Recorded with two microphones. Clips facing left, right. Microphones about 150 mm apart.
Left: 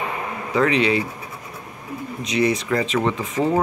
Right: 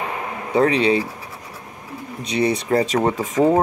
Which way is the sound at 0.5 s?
30° right (ahead or behind).